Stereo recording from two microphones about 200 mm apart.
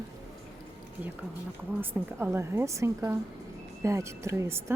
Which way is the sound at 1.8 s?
10° right (ahead or behind).